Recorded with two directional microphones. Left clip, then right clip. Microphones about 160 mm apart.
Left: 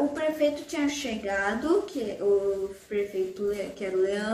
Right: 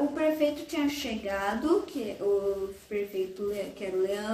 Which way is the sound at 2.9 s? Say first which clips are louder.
Left 3 dB; 15° left (ahead or behind).